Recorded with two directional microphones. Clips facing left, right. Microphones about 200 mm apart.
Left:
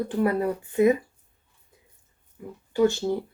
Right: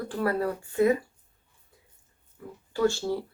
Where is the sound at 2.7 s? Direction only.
20° left (ahead or behind).